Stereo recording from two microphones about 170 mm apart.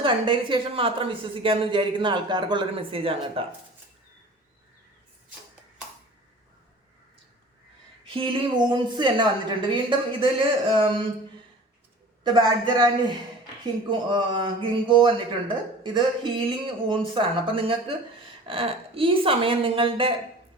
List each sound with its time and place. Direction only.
0.0 s speech: 30° right (ahead or behind)
8.1 s a woman's voice: 30° right (ahead or behind)
12.2 s a woman's voice: 25° right (ahead or behind)